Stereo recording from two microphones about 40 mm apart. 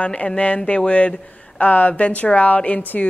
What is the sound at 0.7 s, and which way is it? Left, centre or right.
A woman's voice, left.